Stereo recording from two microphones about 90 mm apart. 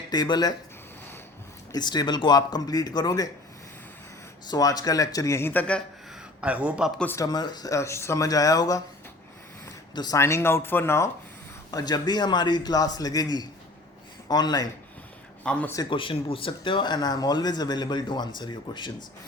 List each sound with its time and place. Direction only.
0.1 s a man's voice: 50° left (ahead or behind)
1.7 s a man's voice: 50° left (ahead or behind)
4.4 s speech: 45° left (ahead or behind); by 5.6 s 25° left (ahead or behind)
6.4 s speech: 15° right (ahead or behind)
7.3 s speech: 50° left (ahead or behind)
9.9 s speech: 50° left (ahead or behind)
10.2 s speech: 30° left (ahead or behind)
11.7 s a man's voice: 45° left (ahead or behind)
15.4 s speech: 15° left (ahead or behind)
15.9 s speech: 75° left (ahead or behind); by 18.9 s 60° left (ahead or behind)